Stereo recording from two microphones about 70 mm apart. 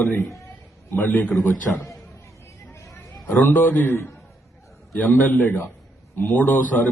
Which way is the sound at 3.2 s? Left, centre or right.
Left.